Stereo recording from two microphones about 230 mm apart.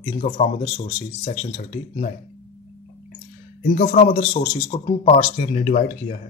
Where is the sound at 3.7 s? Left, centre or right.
Left.